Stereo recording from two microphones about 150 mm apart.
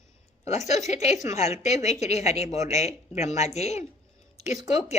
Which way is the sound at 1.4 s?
45° left (ahead or behind).